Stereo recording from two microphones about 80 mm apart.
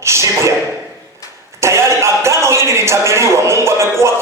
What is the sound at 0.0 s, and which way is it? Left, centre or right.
Music, right.